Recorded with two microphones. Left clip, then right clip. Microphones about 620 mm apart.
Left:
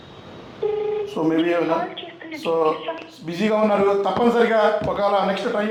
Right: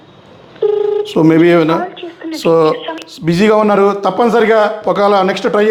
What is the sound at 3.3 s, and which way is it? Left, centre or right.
A man's voice, right.